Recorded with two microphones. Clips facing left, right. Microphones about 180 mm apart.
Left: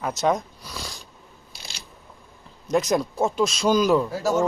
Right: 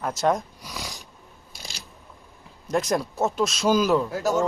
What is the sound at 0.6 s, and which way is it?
Wheeze, 15° right (ahead or behind).